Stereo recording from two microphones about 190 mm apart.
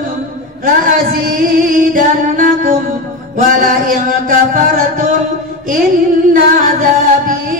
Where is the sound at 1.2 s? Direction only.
50° right (ahead or behind).